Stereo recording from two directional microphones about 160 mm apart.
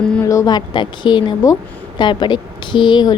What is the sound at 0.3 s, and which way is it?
A woman's voice, 25° left (ahead or behind).